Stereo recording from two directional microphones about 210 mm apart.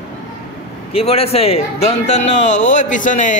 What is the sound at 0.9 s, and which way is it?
A man's voice, 30° left (ahead or behind).